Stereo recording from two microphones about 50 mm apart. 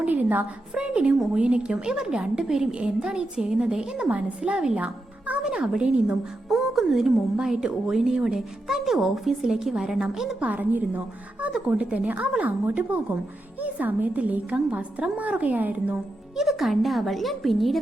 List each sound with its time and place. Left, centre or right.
0.0 s a sound: right
0.7 s a woman's voice: right
4.8 s music: right
5.4 s a woman's voice: centre
6.5 s a woman's voice: centre
10.4 s a woman's voice: right
16.3 s speech: centre